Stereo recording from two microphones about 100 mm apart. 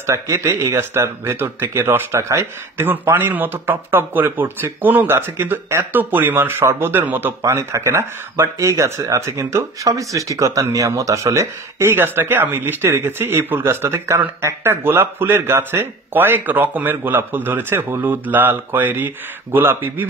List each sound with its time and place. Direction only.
0.0 s speech: 30° right (ahead or behind)